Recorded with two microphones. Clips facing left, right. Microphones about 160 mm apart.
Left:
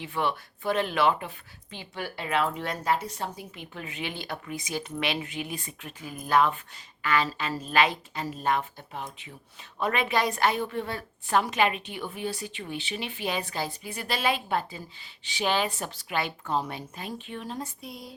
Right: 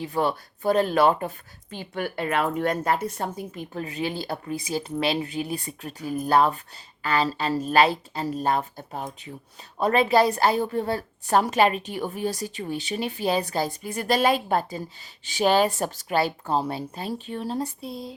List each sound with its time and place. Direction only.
0.0 s a woman's voice: 40° right (ahead or behind)